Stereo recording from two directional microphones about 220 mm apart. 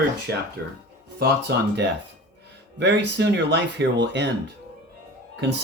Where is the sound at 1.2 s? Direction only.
50° right (ahead or behind).